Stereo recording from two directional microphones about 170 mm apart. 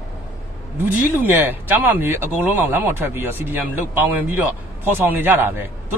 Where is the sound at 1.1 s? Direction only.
10° right (ahead or behind).